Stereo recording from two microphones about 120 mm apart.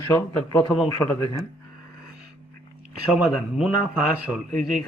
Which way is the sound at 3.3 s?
Centre (ahead or behind).